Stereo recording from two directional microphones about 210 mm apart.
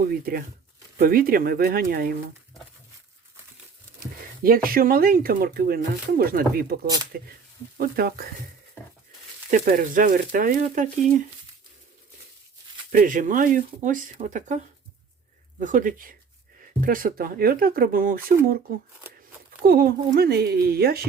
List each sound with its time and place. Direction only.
0.0 s speech: 45° right (ahead or behind)
4.4 s speech: 45° right (ahead or behind)
7.8 s speech: 45° right (ahead or behind)
9.5 s speech: 40° right (ahead or behind)
12.9 s speech: 40° right (ahead or behind)
19.6 s speech: 45° right (ahead or behind)